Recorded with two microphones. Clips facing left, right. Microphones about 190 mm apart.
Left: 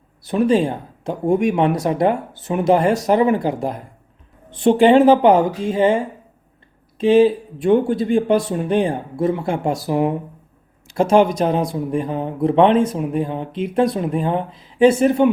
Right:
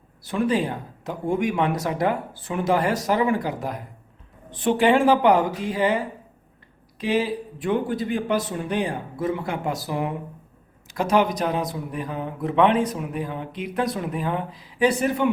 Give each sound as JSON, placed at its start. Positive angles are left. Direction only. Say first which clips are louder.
{"t": 0.3, "sound": "speech", "louder": "left 6 dB", "side_deg": 25}
{"t": 7.0, "sound": "speech", "louder": "left 10 dB", "side_deg": 25}